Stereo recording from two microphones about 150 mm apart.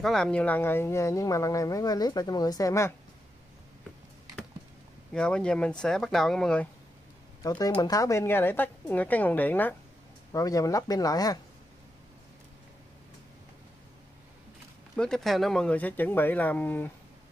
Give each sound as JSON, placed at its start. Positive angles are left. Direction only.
{"t": 0.0, "sound": "speech", "side_deg": 5}
{"t": 5.1, "sound": "speech", "side_deg": 5}
{"t": 7.4, "sound": "a woman's voice", "side_deg": 25}
{"t": 10.3, "sound": "speech", "side_deg": 25}
{"t": 15.0, "sound": "a woman's voice", "side_deg": 5}